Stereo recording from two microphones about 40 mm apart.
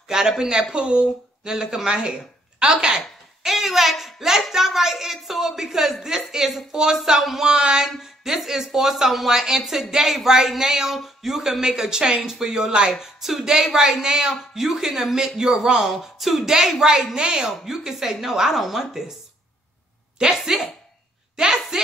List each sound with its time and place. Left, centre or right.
0.1 s a woman's voice: centre
3.4 s a sound: centre
4.5 s a woman's voice: centre
17.5 s a woman's voice: centre
20.4 s a woman's voice: centre
21.4 s a sound: centre